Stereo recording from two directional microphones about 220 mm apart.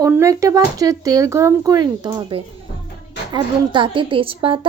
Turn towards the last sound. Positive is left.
turn(degrees=-25)  # may be behind; listen again after turning